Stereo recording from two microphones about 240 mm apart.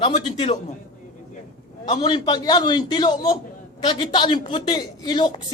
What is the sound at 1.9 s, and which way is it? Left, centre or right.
Speech, left.